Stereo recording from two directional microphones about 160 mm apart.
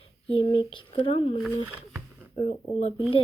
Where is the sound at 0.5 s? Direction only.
30° left (ahead or behind).